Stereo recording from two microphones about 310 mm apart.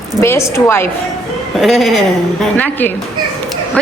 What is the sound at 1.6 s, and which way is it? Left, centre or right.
Speech, centre.